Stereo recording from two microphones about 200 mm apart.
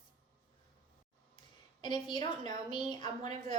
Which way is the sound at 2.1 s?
20° left (ahead or behind).